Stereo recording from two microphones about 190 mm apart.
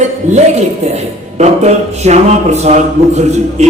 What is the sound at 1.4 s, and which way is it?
A woman's voice, 35° right (ahead or behind).